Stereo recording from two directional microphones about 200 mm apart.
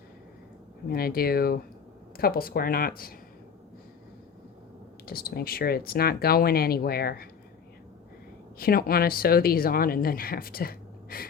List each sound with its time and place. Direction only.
0.9 s speech: 50° left (ahead or behind)
5.0 s speech: 50° left (ahead or behind)
8.5 s speech: 45° left (ahead or behind)